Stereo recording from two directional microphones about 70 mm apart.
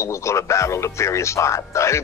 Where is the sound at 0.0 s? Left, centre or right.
Left.